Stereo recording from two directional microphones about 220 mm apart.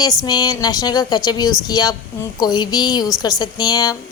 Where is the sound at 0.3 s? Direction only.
20° left (ahead or behind).